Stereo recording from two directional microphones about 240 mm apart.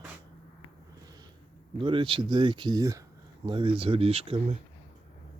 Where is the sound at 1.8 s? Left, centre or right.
Right.